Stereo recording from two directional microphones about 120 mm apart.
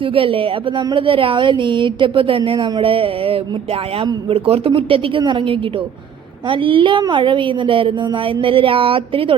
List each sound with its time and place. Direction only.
0.0 s a woman's voice: 50° right (ahead or behind)